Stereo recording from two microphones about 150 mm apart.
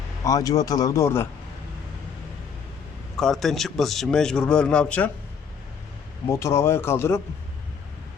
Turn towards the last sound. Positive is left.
turn(degrees=15)  # may be behind; listen again after turning